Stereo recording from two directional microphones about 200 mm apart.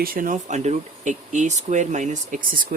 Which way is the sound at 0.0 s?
45° right (ahead or behind).